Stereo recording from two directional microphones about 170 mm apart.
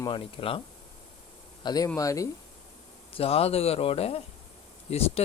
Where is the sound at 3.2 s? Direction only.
35° left (ahead or behind).